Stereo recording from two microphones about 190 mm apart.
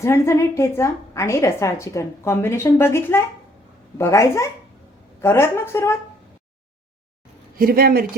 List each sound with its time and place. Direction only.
0.0 s a woman's voice: 15° left (ahead or behind)
7.6 s speech: 50° right (ahead or behind)